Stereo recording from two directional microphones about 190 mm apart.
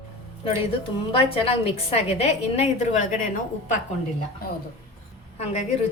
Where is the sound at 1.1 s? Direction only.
30° left (ahead or behind).